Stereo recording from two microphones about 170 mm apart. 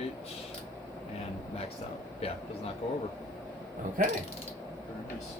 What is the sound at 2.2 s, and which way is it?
Speech, 35° left (ahead or behind).